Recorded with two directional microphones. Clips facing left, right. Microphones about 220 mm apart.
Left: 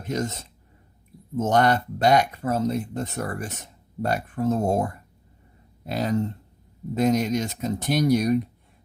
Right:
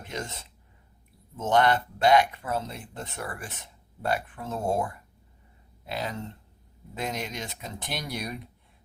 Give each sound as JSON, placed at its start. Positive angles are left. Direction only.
{"t": 0.1, "sound": "speech", "side_deg": 40}